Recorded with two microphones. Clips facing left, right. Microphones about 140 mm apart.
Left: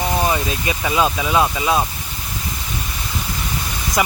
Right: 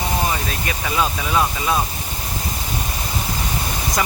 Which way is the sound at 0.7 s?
20° left (ahead or behind).